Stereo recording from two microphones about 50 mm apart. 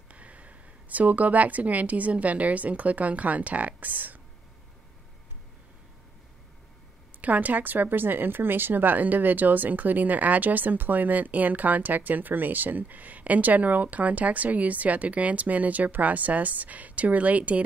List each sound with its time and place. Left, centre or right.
0.1 s speech: right
7.2 s speech: right